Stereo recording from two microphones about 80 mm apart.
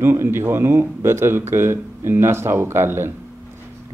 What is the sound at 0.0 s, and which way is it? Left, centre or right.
Speech, right.